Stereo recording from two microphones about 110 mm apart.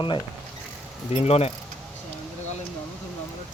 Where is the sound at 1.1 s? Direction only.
75° left (ahead or behind).